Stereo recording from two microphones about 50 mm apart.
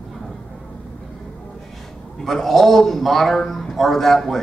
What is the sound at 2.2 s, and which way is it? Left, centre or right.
A man's voice, centre.